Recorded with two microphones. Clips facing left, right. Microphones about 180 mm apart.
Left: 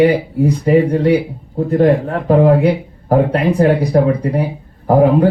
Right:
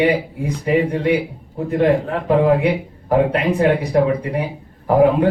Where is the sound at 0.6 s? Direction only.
40° left (ahead or behind).